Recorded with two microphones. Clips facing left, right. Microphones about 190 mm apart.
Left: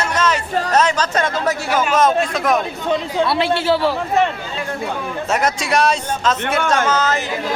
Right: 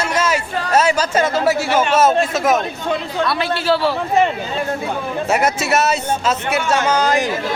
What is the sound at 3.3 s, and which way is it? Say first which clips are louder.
Speech: left 1 dB; 25° left (ahead or behind).